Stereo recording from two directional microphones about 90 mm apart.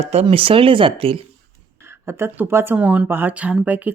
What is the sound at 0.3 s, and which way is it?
Speech, 85° right.